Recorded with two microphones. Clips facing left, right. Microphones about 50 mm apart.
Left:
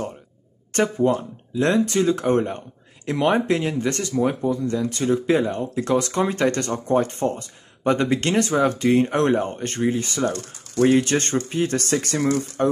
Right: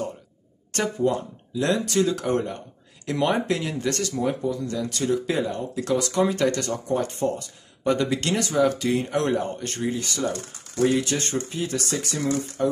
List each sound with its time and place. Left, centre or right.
0.7 s speech: left
10.8 s speech: left